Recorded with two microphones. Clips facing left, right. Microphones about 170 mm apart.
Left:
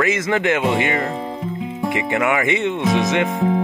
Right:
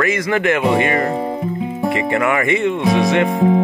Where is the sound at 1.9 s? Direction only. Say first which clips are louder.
Right 2 dB; 20° left (ahead or behind).